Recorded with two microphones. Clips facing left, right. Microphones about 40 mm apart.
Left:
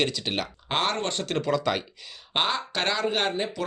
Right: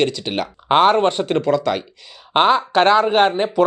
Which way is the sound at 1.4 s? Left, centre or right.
Centre.